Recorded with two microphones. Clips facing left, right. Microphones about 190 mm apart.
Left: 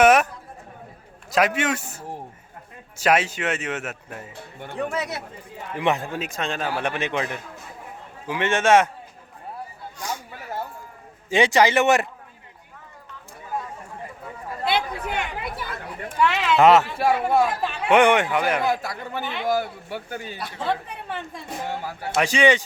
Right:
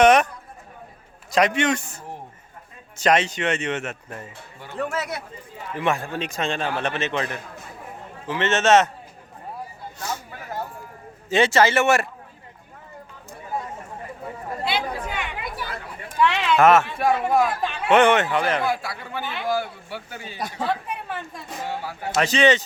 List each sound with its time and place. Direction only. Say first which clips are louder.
0.0 s a sound: right 1 dB; 5° left (ahead or behind)
1.3 s speech: right 2 dB; 5° left (ahead or behind)
4.8 s speech: even; 15° left (ahead or behind)
6.1 s speech: right 2 dB; centre (ahead or behind)
10.0 s a sound: right 1 dB; 15° left (ahead or behind)
11.3 s speech: even; 15° left (ahead or behind)
14.6 s chatter: left 2 dB; 55° left (ahead or behind)
16.2 s a sound: even; 10° left (ahead or behind)
17.3 s speech: even; 20° left (ahead or behind)
18.7 s a man's voice: left 1 dB; 45° left (ahead or behind)
20.7 s speech: left 3 dB; 25° left (ahead or behind)
22.2 s speech: even; 10° left (ahead or behind)